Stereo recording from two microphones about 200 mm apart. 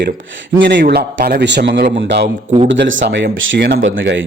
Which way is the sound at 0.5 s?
65° right (ahead or behind).